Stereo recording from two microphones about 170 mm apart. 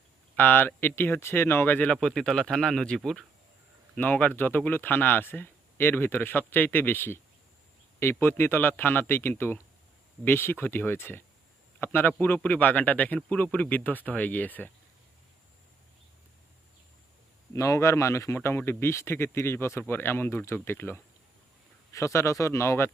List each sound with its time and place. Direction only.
0.3 s speech: 10° left (ahead or behind)
17.5 s speech: 20° left (ahead or behind)